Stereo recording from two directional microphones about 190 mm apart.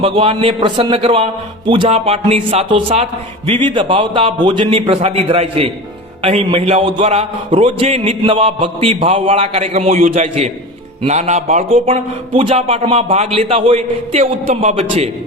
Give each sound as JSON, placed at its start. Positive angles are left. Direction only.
{"t": 0.0, "sound": "a man's voice", "side_deg": -30}